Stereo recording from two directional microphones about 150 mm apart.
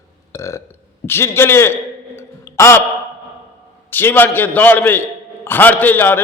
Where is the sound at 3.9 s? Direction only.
15° left (ahead or behind).